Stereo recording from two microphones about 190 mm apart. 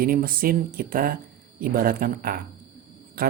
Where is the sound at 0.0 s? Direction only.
50° right (ahead or behind).